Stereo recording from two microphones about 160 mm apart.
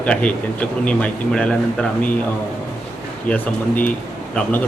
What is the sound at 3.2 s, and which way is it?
Speech, 10° left (ahead or behind).